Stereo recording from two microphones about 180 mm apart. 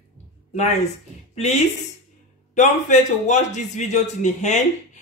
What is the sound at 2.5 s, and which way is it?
A man's voice, 40° left (ahead or behind).